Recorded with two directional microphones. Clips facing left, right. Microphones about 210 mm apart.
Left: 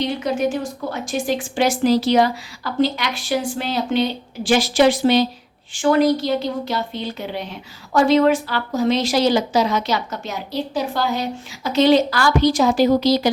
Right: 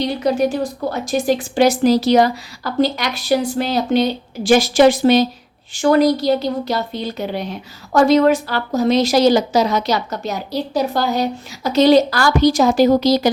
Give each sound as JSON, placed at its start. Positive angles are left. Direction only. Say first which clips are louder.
{"t": 0.0, "sound": "a woman's voice", "louder": "right 3 dB", "side_deg": -35}